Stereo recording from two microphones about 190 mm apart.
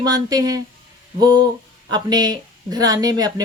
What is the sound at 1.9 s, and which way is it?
Speech, 20° right (ahead or behind).